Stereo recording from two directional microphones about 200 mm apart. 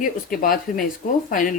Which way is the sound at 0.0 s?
45° left (ahead or behind).